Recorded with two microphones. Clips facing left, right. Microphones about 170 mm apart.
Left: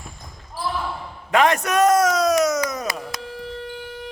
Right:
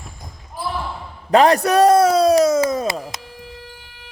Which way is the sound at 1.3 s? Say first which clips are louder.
Right 5 dB; 35° right (ahead or behind).